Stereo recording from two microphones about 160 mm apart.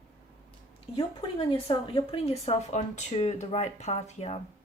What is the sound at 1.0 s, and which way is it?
Speech, 30° left (ahead or behind).